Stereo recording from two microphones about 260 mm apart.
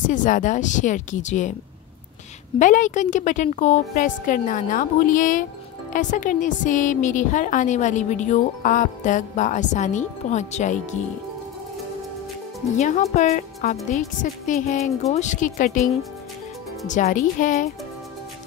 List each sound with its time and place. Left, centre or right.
0.0 s a woman's voice: left
2.6 s a woman's voice: left
12.7 s a woman's voice: left